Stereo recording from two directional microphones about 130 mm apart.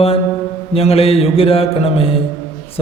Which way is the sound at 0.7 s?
50° left (ahead or behind).